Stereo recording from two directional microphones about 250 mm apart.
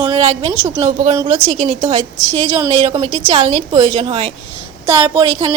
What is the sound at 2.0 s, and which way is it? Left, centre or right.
Speech, centre.